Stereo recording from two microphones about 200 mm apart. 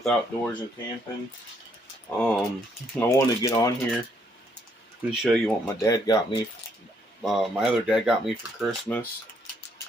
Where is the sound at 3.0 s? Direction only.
15° left (ahead or behind).